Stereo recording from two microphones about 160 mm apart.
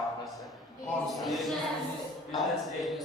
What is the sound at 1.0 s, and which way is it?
Speech, centre (ahead or behind).